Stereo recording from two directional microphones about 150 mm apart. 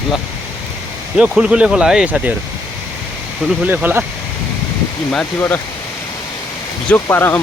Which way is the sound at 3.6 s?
10° right (ahead or behind).